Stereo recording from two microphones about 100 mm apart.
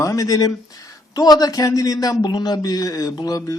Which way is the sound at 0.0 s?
35° left (ahead or behind).